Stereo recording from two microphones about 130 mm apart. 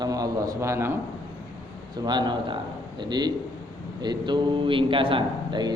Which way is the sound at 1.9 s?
35° right (ahead or behind).